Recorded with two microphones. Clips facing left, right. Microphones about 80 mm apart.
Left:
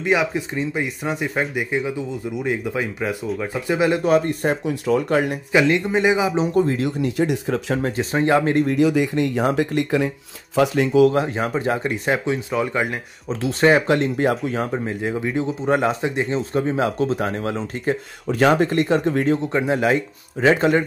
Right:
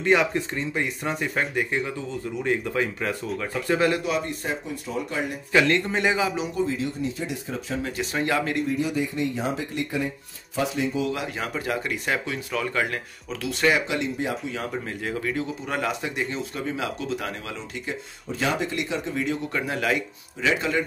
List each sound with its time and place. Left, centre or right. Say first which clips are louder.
0.0 s speech: left 1 dB; centre
4.0 s speech: left 9 dB; left
5.5 s speech: left 3 dB; centre
6.5 s speech: left 7 dB; left
7.8 s speech: left 7 dB; left
8.6 s speech: left 8 dB; left
11.1 s speech: left 9 dB; left
14.5 s speech: left 7 dB; left
18.3 s speech: left 9 dB; left
19.3 s speech: left 8 dB; left
20.4 s speech: left 8 dB; left